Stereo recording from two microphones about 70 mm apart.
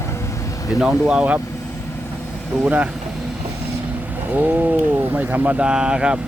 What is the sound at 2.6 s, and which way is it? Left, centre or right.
Speech, centre.